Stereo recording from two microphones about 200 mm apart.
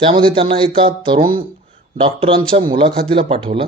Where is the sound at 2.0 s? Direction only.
25° right (ahead or behind).